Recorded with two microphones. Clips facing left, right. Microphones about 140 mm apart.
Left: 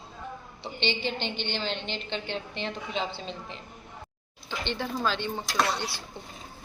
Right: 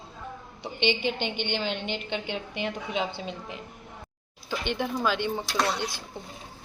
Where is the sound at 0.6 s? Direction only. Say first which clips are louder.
Right 4 dB; 10° right (ahead or behind).